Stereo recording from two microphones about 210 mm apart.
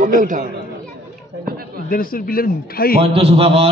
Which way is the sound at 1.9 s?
40° left (ahead or behind).